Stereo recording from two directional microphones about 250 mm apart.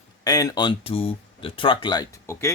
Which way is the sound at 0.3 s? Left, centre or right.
Centre.